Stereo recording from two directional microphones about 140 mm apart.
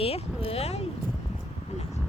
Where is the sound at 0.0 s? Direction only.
45° left (ahead or behind).